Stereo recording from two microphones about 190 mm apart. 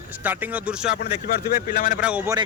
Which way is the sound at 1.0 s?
55° left (ahead or behind).